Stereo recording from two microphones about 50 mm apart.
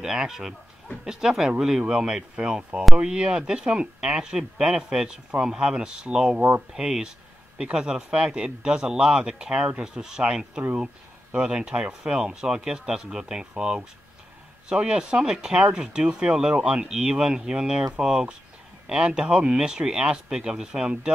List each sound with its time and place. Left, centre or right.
0.0 s speech: centre